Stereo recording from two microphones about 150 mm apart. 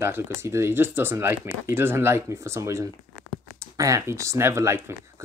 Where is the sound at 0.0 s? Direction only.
15° right (ahead or behind).